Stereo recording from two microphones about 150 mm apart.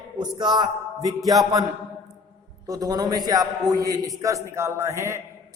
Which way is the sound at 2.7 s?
25° right (ahead or behind).